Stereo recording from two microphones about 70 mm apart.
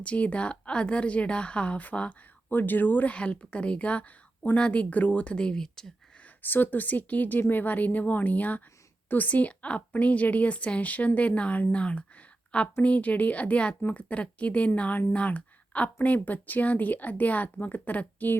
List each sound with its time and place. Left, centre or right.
0.0 s a woman's voice: centre
6.4 s a woman's voice: left